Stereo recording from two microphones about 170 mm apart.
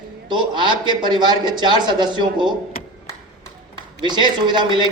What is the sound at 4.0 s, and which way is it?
Speech, 25° right (ahead or behind).